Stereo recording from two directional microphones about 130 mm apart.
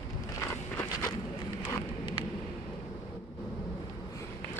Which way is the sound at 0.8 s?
25° left (ahead or behind).